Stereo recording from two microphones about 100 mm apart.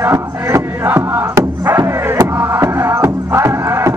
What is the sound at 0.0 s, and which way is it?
Crowd, 25° right (ahead or behind).